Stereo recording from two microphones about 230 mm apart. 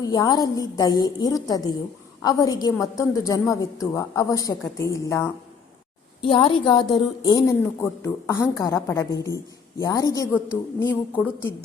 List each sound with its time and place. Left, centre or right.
0.0 s a woman's voice: centre
6.2 s a woman's voice: left